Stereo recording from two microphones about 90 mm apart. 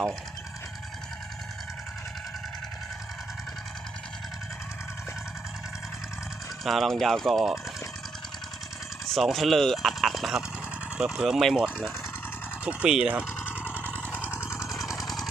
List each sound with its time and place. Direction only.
6.7 s speech: 5° left (ahead or behind)
9.0 s speech: centre (ahead or behind)
13.6 s vehicle: 15° right (ahead or behind)
14.5 s vehicle: 35° left (ahead or behind)
14.8 s vehicle: centre (ahead or behind)